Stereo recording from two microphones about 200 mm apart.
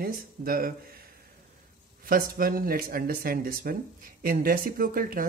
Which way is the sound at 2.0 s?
45° right (ahead or behind).